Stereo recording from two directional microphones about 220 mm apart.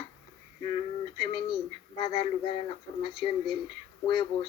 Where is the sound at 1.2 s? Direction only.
25° left (ahead or behind).